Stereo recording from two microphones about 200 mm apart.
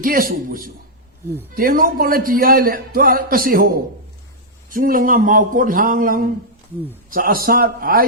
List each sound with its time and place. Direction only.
0.0 s a man's voice: 45° right (ahead or behind)